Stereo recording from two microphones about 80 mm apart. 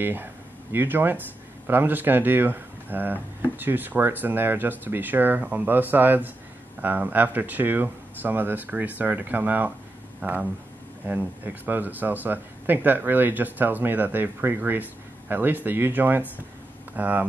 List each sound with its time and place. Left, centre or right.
0.0 s speech: right